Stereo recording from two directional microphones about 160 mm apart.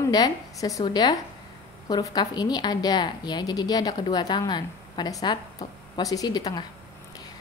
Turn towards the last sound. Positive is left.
turn(degrees=25)  # may be behind; listen again after turning